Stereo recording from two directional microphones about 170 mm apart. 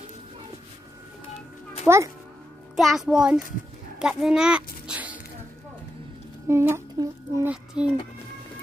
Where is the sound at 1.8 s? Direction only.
15° right (ahead or behind).